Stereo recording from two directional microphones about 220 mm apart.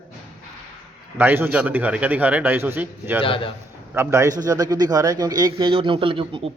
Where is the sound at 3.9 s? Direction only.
10° right (ahead or behind).